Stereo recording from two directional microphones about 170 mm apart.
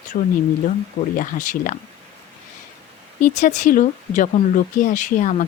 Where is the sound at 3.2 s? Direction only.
45° left (ahead or behind).